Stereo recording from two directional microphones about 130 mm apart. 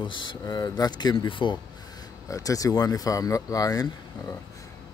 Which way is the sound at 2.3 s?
25° left (ahead or behind).